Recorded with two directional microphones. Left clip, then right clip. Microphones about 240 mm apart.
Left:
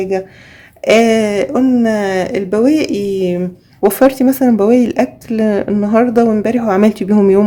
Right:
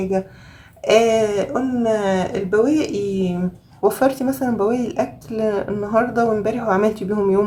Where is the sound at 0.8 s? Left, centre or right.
Left.